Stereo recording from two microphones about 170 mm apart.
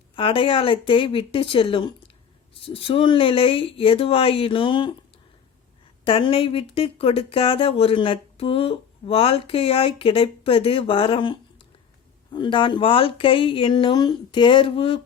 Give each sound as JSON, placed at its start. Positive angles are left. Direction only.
{"t": 0.2, "sound": "speech", "side_deg": 30}
{"t": 6.1, "sound": "speech", "side_deg": 30}